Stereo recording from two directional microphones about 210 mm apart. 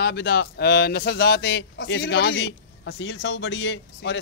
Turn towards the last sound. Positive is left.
turn(degrees=60)  # may be behind; listen again after turning